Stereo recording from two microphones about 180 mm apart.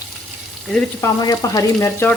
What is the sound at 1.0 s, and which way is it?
Frying, 20° left (ahead or behind).